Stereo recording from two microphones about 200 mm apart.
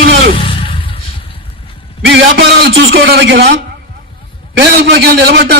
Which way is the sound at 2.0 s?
60° right (ahead or behind).